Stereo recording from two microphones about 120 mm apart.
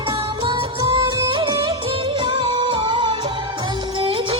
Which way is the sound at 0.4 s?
45° right (ahead or behind).